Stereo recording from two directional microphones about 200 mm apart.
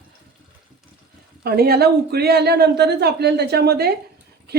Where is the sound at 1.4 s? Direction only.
50° right (ahead or behind).